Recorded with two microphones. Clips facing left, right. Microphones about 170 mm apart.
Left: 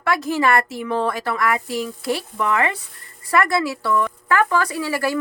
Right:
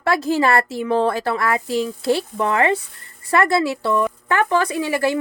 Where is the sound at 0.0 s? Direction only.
30° right (ahead or behind).